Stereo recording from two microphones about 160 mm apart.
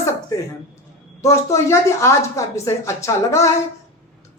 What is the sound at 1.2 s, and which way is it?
A woman's voice, 20° left (ahead or behind).